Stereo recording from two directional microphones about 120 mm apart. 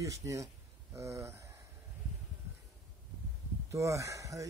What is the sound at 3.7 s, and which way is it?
Speech, 25° right (ahead or behind).